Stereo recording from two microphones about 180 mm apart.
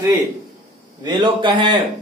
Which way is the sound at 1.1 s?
25° right (ahead or behind).